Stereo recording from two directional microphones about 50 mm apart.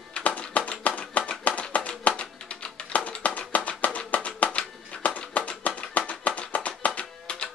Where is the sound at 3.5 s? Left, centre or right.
Left.